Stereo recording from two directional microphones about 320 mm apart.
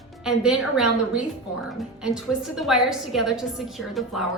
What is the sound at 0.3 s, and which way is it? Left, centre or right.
A woman's voice, centre.